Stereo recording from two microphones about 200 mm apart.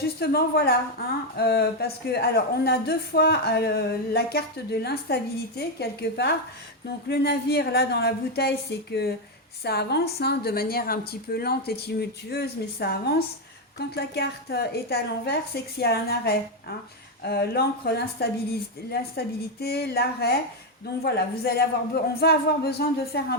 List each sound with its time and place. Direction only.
0.0 s speech: 50° left (ahead or behind)